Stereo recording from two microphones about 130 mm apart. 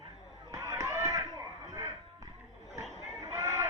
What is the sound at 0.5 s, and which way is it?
Chop, 20° right (ahead or behind).